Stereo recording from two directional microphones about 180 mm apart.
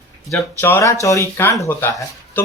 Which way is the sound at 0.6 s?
15° left (ahead or behind).